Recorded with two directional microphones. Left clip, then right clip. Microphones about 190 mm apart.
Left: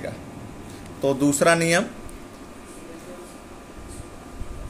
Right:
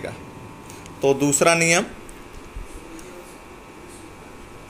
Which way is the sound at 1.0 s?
15° right (ahead or behind).